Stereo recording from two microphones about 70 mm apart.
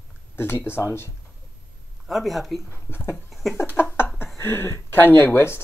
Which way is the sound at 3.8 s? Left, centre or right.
Left.